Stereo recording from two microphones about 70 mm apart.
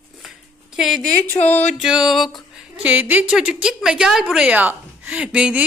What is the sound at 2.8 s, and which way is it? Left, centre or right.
Speech, right.